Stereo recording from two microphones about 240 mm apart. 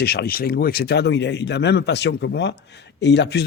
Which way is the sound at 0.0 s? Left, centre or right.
Left.